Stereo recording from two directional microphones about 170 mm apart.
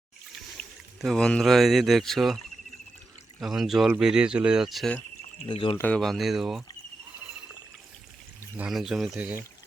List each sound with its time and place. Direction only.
1.0 s speech: 5° left (ahead or behind)
3.4 s speech: centre (ahead or behind)
5.5 s speech: 30° left (ahead or behind)
5.7 s speech: 10° left (ahead or behind)
8.5 s speech: 5° right (ahead or behind)